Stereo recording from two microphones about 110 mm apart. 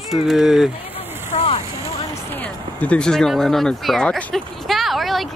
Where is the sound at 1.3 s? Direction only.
90° left.